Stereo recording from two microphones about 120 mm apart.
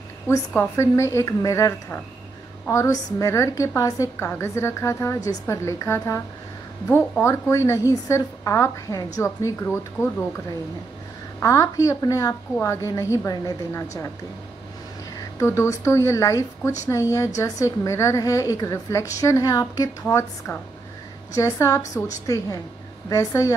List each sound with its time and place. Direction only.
0.5 s a woman's voice: 20° left (ahead or behind)
11.4 s a woman's voice: 25° left (ahead or behind)
15.3 s a woman's voice: 20° left (ahead or behind)